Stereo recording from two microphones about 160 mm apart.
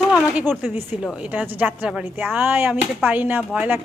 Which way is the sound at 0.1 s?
10° right (ahead or behind).